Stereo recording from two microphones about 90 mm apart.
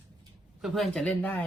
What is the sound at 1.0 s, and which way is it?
Speech, 15° left (ahead or behind).